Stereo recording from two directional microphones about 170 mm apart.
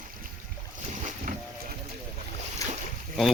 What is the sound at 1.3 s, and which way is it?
Boat, 50° right (ahead or behind).